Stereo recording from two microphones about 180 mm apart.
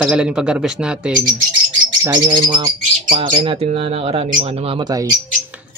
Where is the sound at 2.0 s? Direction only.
25° right (ahead or behind).